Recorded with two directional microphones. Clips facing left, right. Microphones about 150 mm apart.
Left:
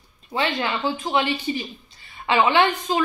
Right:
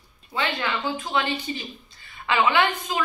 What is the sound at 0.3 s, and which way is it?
Speech, 25° left (ahead or behind).